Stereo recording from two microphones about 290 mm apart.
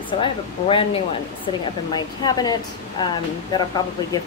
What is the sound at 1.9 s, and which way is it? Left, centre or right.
A woman's voice, centre.